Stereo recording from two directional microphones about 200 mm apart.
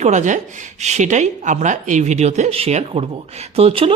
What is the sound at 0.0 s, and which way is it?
Speech, 35° right (ahead or behind).